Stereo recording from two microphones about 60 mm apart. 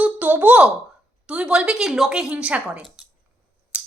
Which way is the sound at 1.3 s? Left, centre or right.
Centre.